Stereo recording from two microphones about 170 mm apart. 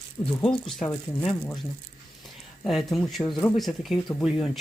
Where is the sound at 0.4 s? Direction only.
5° left (ahead or behind).